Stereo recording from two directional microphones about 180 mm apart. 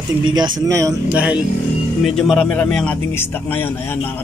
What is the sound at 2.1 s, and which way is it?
A man's voice, centre (ahead or behind).